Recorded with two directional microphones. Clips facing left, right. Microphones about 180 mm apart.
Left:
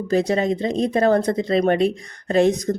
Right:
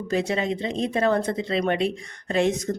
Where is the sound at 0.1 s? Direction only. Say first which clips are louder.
Left 5 dB; 40° left (ahead or behind).